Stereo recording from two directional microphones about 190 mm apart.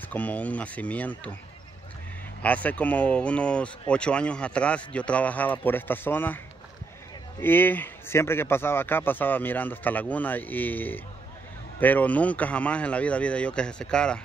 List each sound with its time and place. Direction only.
0.1 s speech: 10° left (ahead or behind)
2.4 s speech: 10° left (ahead or behind)